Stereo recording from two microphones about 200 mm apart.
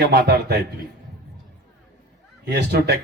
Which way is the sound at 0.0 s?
55° right (ahead or behind).